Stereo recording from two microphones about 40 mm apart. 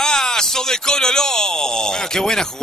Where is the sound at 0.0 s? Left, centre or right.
Centre.